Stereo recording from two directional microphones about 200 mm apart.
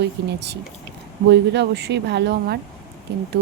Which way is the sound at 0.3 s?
60° right (ahead or behind).